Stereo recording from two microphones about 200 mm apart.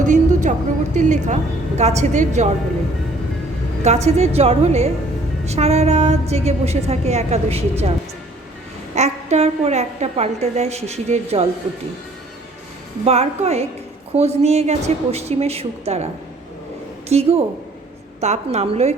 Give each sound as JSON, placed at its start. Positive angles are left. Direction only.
{"t": 0.0, "sound": "a sound", "side_deg": -40}
{"t": 0.9, "sound": "a woman's voice", "side_deg": -35}
{"t": 3.8, "sound": "a woman's voice", "side_deg": -35}
{"t": 9.0, "sound": "a woman's voice", "side_deg": -35}
{"t": 13.1, "sound": "a woman's voice", "side_deg": -30}
{"t": 17.1, "sound": "a woman's voice", "side_deg": -30}